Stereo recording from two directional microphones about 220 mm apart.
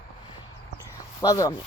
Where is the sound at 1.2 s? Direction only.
15° left (ahead or behind).